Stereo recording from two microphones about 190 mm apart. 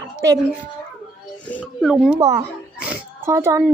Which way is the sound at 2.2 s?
20° right (ahead or behind).